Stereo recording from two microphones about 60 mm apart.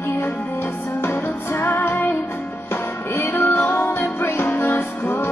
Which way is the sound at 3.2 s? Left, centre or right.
Left.